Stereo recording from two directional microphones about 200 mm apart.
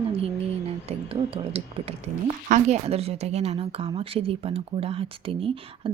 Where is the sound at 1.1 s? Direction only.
30° right (ahead or behind).